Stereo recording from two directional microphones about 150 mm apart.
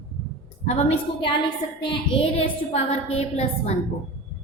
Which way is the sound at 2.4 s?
45° left (ahead or behind).